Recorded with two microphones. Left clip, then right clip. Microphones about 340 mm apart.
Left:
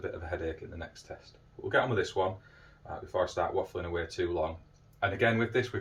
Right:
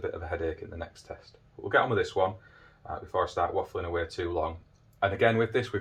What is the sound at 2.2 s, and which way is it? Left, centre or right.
Speech, centre.